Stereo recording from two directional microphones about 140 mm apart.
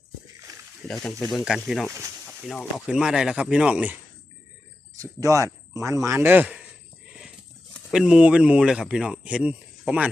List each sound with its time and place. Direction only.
0.5 s wild animals: 25° right (ahead or behind)
0.9 s speech: 5° left (ahead or behind)
1.9 s speech: 20° right (ahead or behind)
2.4 s speech: 5° left (ahead or behind)
4.9 s speech: 25° right (ahead or behind)
7.9 s speech: 5° right (ahead or behind)